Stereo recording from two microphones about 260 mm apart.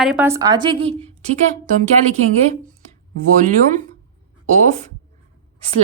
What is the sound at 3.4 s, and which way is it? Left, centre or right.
Speech, right.